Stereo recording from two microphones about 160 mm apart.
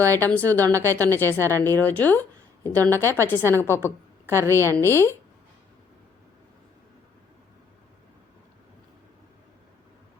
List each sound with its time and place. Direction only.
0.1 s a woman's voice: 10° left (ahead or behind)